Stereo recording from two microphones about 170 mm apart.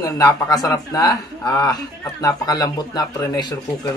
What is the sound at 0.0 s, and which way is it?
Speech, 20° left (ahead or behind).